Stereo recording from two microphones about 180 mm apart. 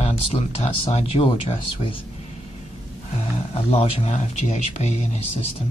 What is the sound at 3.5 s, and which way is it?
Speech, 35° left (ahead or behind).